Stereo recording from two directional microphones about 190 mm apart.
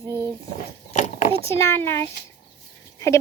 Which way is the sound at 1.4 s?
15° left (ahead or behind).